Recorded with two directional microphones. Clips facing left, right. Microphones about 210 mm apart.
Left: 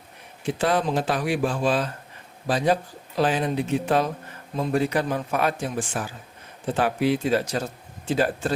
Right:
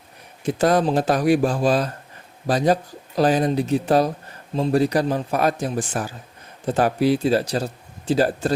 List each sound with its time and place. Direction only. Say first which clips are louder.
0.4 s speech: right 5 dB; 40° right (ahead or behind)